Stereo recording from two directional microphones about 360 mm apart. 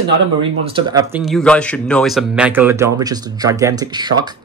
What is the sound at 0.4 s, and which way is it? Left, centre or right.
Speech, centre.